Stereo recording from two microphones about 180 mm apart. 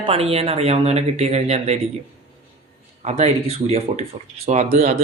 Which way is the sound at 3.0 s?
40° right (ahead or behind).